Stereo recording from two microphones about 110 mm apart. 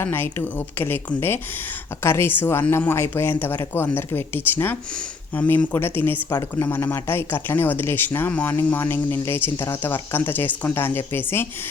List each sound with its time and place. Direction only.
0.0 s speech: 20° left (ahead or behind)